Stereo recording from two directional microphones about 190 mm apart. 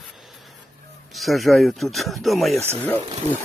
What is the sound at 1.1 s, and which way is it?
Speech, centre (ahead or behind).